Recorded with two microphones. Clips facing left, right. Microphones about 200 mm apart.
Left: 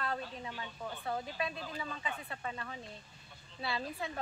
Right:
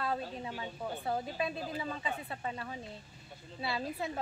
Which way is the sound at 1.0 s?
25° right (ahead or behind).